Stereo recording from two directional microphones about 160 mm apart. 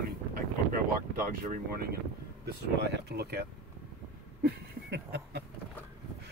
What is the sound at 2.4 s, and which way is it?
Speech, 90° right.